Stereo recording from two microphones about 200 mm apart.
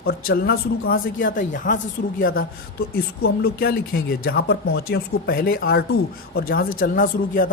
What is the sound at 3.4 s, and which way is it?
Speech, 50° left (ahead or behind).